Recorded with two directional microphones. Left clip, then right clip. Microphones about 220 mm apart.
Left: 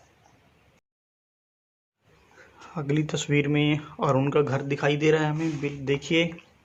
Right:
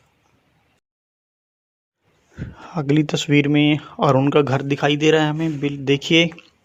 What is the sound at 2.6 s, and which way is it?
Speech, 30° right (ahead or behind).